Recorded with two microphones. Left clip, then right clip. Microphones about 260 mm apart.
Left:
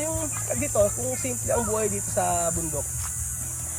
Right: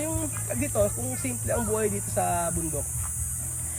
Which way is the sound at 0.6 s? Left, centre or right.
Centre.